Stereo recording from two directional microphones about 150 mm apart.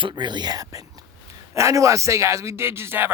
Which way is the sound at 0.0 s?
30° right (ahead or behind).